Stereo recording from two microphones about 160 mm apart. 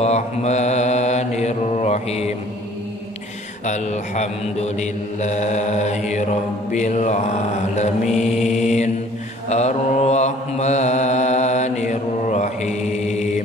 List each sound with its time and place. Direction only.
0.0 s mantra: 45° left (ahead or behind)
3.6 s mantra: 45° left (ahead or behind)